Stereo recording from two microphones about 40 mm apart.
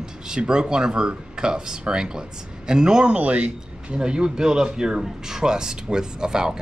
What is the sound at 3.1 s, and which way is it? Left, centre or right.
Speech, right.